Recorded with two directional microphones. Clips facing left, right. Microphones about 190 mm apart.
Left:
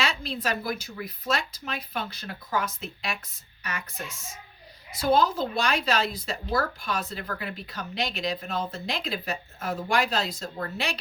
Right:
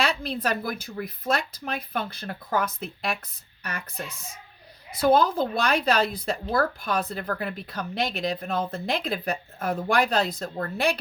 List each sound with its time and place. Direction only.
0.0 s speech: 55° right (ahead or behind)
4.9 s speech: 55° right (ahead or behind)